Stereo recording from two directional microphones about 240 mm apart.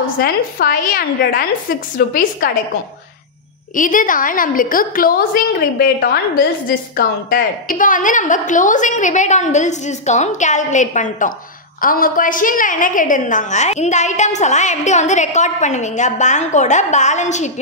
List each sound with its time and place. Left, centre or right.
0.0 s a woman's voice: left
3.7 s a woman's voice: left